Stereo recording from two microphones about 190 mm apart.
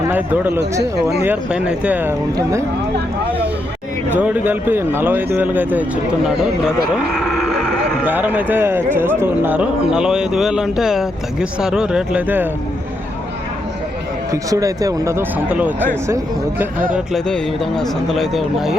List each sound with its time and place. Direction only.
0.1 s speech: 10° right (ahead or behind)
0.6 s speech: 60° right (ahead or behind)
1.2 s speech: 5° right (ahead or behind)
4.2 s speech: 10° right (ahead or behind)
14.5 s speech: 20° right (ahead or behind)
17.1 s speech: 5° left (ahead or behind)